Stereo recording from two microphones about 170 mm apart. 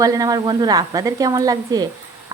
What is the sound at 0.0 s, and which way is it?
A woman's voice, 20° right (ahead or behind).